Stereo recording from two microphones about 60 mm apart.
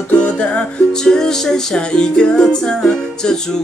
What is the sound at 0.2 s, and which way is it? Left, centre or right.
Music, left.